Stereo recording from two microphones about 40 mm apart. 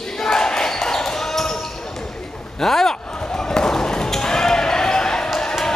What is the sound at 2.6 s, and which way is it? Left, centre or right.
Basketball bounce, centre.